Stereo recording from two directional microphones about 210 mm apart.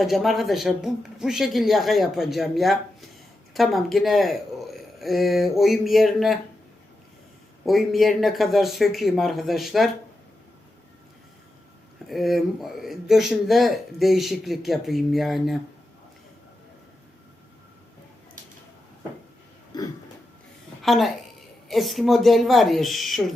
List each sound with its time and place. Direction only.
0.0 s speech: centre (ahead or behind)
7.6 s speech: centre (ahead or behind)
12.0 s speech: centre (ahead or behind)
19.7 s a sound: 20° left (ahead or behind)
20.8 s a woman's voice: centre (ahead or behind)